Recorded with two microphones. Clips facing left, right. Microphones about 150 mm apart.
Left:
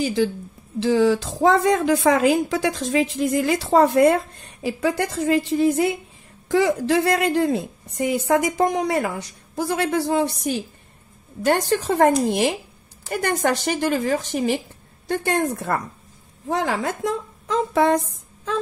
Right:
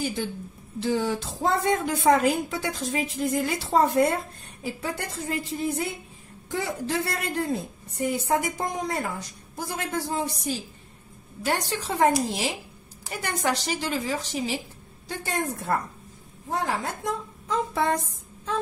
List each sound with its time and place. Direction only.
0.0 s a woman's voice: 90° left; by 10.6 s 65° left (ahead or behind)
11.4 s a woman's voice: 55° left (ahead or behind); by 15.8 s 75° left (ahead or behind)
16.4 s a woman's voice: 90° left